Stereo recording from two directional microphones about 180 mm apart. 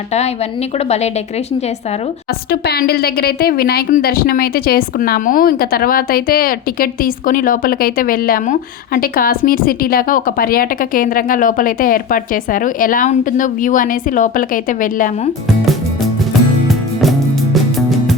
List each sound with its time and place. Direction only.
2.5 s a woman's voice: 60° left (ahead or behind)
16.6 s music: centre (ahead or behind)